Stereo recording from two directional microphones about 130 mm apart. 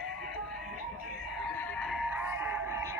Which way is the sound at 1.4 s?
10° left (ahead or behind).